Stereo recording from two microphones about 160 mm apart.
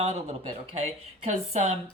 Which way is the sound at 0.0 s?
40° right (ahead or behind).